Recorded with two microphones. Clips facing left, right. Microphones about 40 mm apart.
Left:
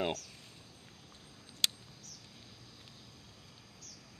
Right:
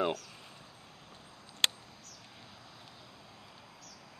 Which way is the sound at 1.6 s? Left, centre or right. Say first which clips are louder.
Right 4 dB; right.